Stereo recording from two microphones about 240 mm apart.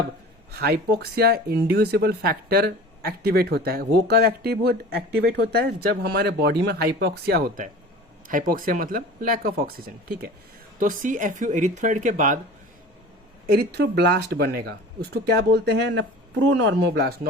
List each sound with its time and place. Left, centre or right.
0.5 s speech: right
13.5 s speech: right